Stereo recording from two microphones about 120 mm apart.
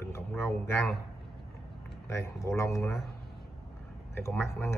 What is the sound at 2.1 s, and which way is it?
Speech, 25° left (ahead or behind).